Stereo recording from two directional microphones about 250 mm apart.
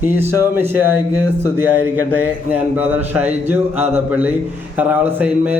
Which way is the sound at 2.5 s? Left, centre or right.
Centre.